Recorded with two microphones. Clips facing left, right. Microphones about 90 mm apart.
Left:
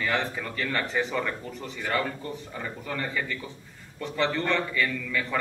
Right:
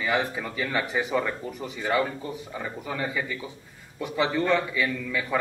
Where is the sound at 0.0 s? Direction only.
10° right (ahead or behind).